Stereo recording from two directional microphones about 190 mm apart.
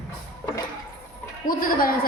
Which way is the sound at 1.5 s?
45° left (ahead or behind).